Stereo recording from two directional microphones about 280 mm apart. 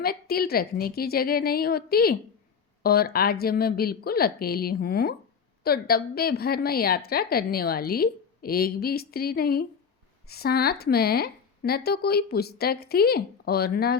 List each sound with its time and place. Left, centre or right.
0.0 s a woman's voice: left